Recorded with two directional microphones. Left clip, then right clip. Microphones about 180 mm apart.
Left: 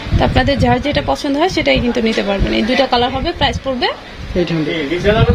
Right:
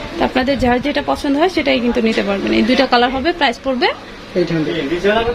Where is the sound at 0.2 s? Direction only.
5° left (ahead or behind).